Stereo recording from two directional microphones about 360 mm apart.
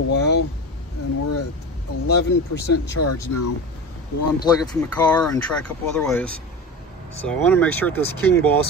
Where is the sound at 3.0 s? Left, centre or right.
Left.